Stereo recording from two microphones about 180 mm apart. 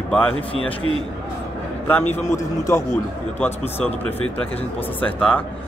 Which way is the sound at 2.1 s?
15° left (ahead or behind).